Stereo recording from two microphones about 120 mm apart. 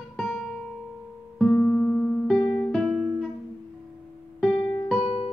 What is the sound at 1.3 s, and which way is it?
Music, 5° left (ahead or behind).